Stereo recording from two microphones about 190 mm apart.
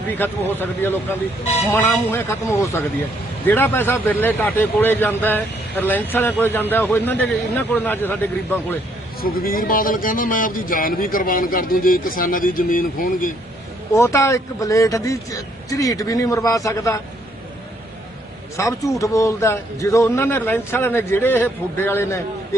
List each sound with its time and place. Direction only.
0.2 s a man's voice: 10° left (ahead or behind)
9.2 s a man's voice: 50° left (ahead or behind)
13.9 s a man's voice: 15° left (ahead or behind)
18.5 s a man's voice: 15° left (ahead or behind)